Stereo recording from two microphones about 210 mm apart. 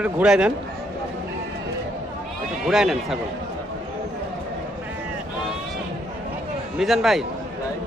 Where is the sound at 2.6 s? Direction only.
Centre (ahead or behind).